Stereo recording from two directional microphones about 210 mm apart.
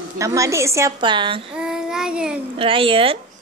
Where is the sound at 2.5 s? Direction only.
25° right (ahead or behind).